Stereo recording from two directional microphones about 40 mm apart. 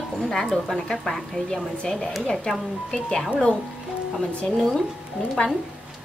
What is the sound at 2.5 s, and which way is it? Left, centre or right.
Speech, left.